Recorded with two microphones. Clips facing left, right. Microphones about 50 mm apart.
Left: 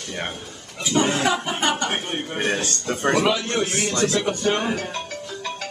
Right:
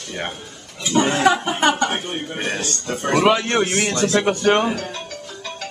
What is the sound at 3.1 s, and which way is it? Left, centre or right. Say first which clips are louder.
Speech: right 4 dB; right.